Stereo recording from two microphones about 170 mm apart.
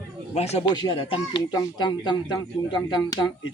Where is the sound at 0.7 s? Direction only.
25° left (ahead or behind).